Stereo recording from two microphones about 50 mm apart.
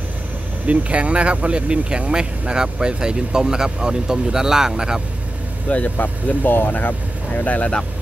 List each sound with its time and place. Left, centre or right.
0.7 s speech: right
5.7 s speech: left